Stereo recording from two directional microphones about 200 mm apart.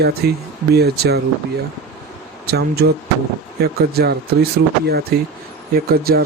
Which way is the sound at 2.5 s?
55° right (ahead or behind).